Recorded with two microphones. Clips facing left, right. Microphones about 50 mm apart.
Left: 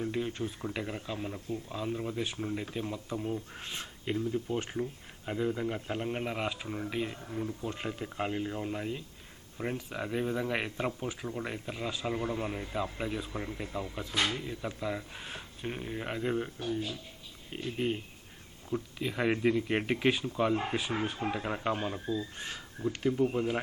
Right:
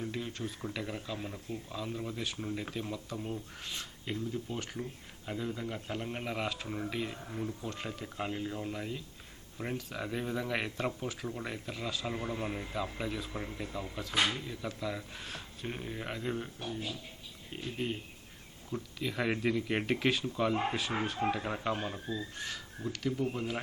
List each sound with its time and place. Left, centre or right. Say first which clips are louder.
0.0 s speech: left 4 dB; centre
3.6 s speech: left 2 dB; left; by 7.5 s centre
7.6 s speech: left 3 dB; centre
14.1 s speech: right 1 dB; centre
14.3 s speech: left 2 dB; centre
17.5 s speech: left 4 dB; centre
20.9 s speech: left 1 dB; centre
21.2 s speech: left 1 dB; centre
22.4 s speech: left 1 dB; left
23.3 s speech: left 5 dB; centre